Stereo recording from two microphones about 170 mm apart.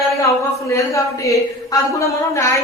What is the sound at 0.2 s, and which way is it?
Speech, 20° left (ahead or behind).